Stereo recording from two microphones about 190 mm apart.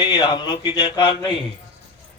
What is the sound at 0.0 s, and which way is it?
Speech, 25° left (ahead or behind).